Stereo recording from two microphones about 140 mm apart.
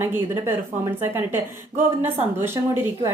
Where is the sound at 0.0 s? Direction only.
15° right (ahead or behind).